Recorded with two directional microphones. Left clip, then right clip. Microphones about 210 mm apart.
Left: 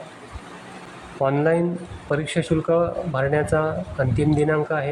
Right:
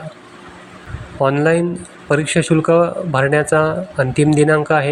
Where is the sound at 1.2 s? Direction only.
15° right (ahead or behind).